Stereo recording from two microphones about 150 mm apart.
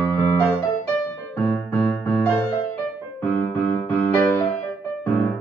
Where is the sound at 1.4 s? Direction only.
15° left (ahead or behind).